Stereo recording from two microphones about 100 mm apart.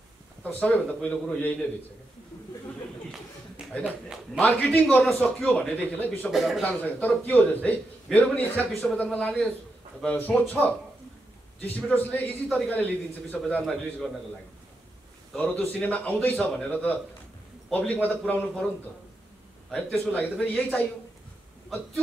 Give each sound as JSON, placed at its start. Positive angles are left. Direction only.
{"t": 0.4, "sound": "a man's voice", "side_deg": 15}
{"t": 4.4, "sound": "a man's voice", "side_deg": 15}
{"t": 6.3, "sound": "a man's voice", "side_deg": -5}
{"t": 6.6, "sound": "a man's voice", "side_deg": 15}
{"t": 15.3, "sound": "a man's voice", "side_deg": 15}
{"t": 19.7, "sound": "a man's voice", "side_deg": 10}